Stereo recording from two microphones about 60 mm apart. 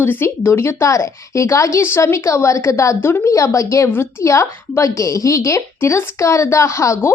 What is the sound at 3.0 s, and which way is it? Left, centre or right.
Speech, left.